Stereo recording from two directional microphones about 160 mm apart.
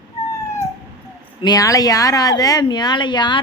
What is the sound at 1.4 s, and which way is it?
Speech, 20° left (ahead or behind).